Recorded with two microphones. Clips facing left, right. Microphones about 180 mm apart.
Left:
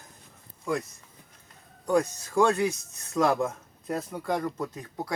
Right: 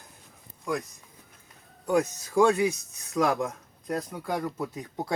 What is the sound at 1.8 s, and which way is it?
Speech, 10° right (ahead or behind).